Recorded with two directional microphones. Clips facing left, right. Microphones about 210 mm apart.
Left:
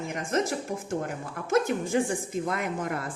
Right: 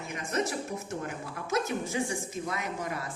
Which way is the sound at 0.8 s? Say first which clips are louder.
Left 4 dB; 50° left (ahead or behind).